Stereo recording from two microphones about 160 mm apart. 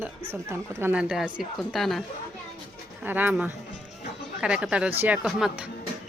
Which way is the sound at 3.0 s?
10° right (ahead or behind).